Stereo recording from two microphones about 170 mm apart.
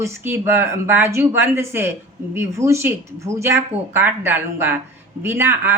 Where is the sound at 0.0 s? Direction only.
15° right (ahead or behind).